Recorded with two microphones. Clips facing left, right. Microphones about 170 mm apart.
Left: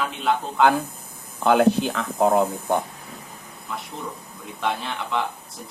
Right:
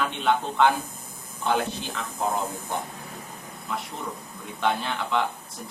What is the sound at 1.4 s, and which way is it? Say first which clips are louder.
Speech: left 9 dB; 60° left (ahead or behind).